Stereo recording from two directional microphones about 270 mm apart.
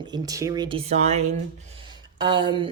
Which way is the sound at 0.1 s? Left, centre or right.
Centre.